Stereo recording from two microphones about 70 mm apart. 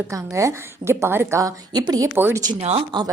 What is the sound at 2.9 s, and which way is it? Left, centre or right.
Speech, right.